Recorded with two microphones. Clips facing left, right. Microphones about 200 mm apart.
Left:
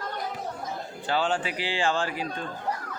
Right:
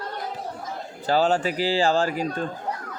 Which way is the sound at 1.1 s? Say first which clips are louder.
Right 6 dB; 40° right (ahead or behind).